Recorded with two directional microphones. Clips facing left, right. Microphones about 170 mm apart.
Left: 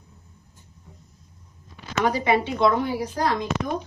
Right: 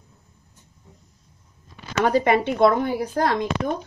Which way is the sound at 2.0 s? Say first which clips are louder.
Right 3 dB; 50° right (ahead or behind).